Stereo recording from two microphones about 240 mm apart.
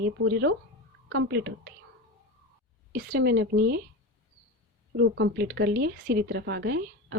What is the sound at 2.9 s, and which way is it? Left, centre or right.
Speech, right.